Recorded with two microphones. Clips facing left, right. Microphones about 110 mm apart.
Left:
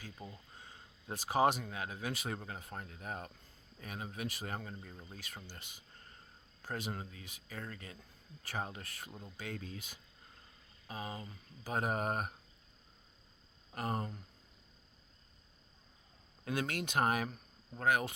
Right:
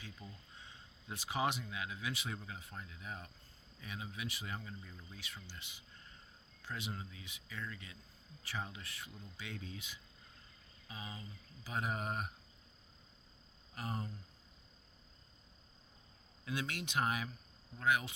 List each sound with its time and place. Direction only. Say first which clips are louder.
0.0 s speech: left 3 dB; 40° left (ahead or behind)
13.7 s speech: left 5 dB; 50° left (ahead or behind)
16.4 s speech: left 4 dB; 50° left (ahead or behind)